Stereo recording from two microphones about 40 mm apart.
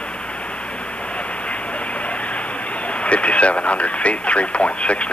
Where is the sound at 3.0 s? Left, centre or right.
Left.